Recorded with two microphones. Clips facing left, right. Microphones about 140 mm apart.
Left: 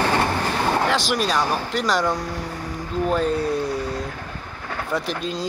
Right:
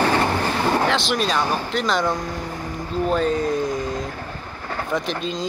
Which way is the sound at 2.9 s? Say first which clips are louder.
Right 1 dB; 5° left (ahead or behind).